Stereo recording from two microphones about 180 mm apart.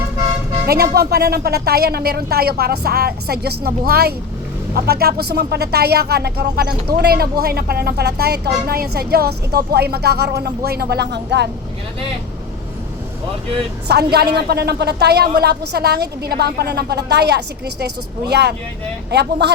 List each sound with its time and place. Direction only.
0.7 s speech: 60° right (ahead or behind)
13.8 s a woman's voice: 65° right (ahead or behind)